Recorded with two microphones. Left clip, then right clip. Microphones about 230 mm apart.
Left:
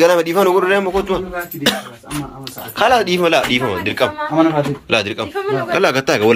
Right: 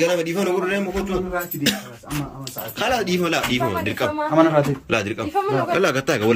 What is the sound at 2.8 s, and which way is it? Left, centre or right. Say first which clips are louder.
A man's voice: left 8 dB; centre.